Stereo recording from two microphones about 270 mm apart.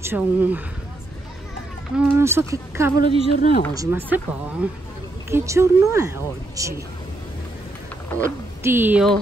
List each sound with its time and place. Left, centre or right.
0.0 s speech: centre
2.0 s speech: centre
3.0 s speech: left
3.7 s speech: centre
8.6 s speech: centre